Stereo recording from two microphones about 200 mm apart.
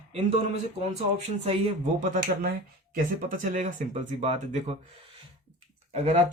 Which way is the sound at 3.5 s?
40° right (ahead or behind).